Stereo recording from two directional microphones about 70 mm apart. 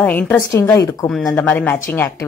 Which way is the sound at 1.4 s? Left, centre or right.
Left.